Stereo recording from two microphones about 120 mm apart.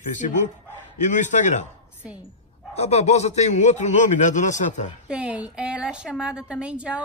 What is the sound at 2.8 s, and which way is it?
A man's voice, 65° left (ahead or behind).